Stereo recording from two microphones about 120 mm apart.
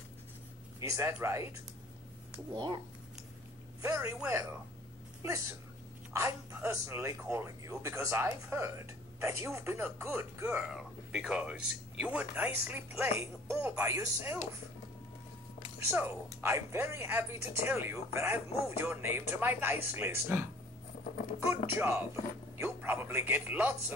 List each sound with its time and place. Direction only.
0.7 s speech: 25° right (ahead or behind)
2.5 s speech: 35° right (ahead or behind)
3.8 s speech: 25° right (ahead or behind)
5.2 s speech: 25° right (ahead or behind)
10.7 s speech: 5° right (ahead or behind); by 14.4 s 25° right (ahead or behind)
15.9 s speech: 20° right (ahead or behind)
21.5 s speech: 20° right (ahead or behind)